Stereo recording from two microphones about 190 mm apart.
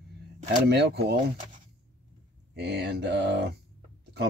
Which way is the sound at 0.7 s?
60° right (ahead or behind).